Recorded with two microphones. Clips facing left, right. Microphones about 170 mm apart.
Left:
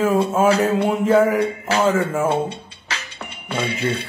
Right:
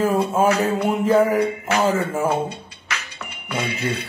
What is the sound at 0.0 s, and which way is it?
Speech, centre (ahead or behind).